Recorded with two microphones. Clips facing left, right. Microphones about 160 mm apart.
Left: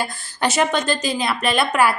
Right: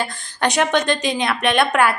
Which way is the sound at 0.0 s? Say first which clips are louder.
Right 1 dB; 5° left (ahead or behind).